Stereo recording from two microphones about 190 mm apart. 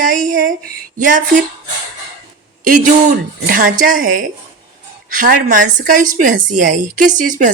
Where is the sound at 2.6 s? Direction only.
45° right (ahead or behind).